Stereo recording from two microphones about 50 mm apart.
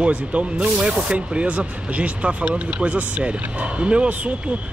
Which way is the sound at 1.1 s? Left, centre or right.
Right.